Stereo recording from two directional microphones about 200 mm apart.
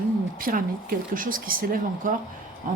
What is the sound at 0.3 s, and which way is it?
Speech, 45° right (ahead or behind).